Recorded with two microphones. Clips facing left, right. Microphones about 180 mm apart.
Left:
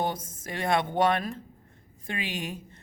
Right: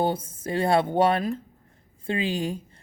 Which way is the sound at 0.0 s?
30° right (ahead or behind).